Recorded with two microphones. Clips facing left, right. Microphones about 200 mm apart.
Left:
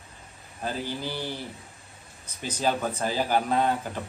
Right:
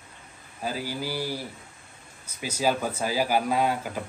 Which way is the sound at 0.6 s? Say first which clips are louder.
Even; 5° right (ahead or behind).